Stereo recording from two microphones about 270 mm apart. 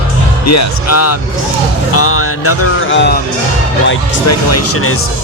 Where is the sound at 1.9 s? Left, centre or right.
Left.